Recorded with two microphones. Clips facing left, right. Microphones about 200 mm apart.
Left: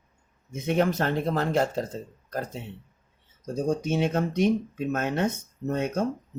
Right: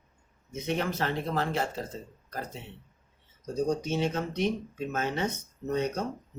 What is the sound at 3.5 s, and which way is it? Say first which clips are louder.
Speech: left 3 dB; 55° left (ahead or behind).